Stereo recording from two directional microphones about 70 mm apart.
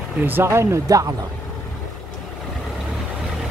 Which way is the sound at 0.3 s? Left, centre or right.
Right.